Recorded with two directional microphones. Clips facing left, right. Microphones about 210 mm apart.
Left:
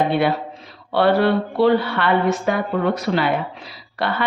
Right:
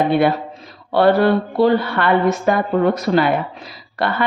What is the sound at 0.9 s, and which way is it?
A woman's voice, 45° right (ahead or behind).